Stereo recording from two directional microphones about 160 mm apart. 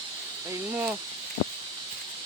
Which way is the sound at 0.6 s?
15° right (ahead or behind).